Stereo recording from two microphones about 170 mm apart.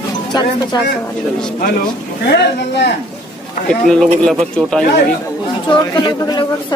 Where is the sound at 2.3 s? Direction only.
80° left.